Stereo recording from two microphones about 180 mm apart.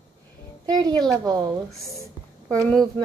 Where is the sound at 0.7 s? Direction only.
25° right (ahead or behind).